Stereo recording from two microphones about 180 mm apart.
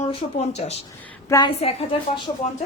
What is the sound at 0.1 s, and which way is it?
Speech, 35° left (ahead or behind).